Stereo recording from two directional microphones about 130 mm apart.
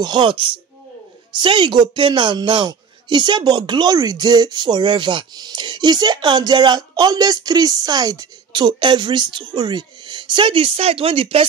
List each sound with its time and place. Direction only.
0.0 s a man's voice: 35° right (ahead or behind)